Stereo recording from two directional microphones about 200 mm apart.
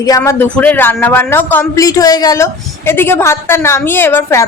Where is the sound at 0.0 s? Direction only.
15° left (ahead or behind).